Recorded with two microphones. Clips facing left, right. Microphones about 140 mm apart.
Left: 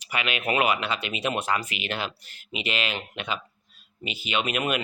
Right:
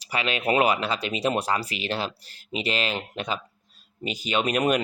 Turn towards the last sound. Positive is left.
turn(degrees=-40)  # may be behind; listen again after turning